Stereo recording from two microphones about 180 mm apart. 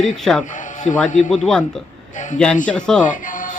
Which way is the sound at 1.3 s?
Centre (ahead or behind).